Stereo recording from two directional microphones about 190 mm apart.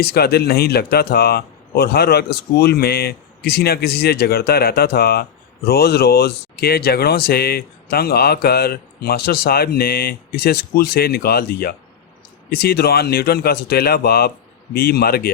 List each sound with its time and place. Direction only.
0.0 s speech: 55° left (ahead or behind)